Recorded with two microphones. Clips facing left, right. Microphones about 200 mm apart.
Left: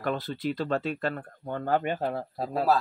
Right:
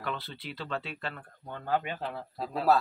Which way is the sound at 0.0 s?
45° left (ahead or behind).